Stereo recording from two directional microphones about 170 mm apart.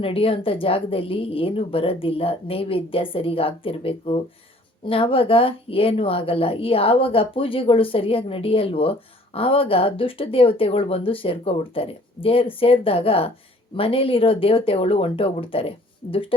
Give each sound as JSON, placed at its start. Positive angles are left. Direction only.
{"t": 0.0, "sound": "a woman's voice", "side_deg": 35}